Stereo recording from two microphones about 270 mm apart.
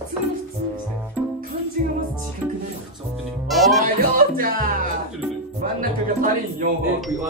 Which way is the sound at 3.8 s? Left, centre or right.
Right.